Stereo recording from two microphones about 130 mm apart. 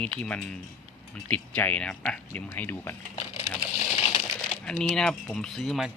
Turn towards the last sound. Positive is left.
turn(degrees=0)  # may be behind; listen again after turning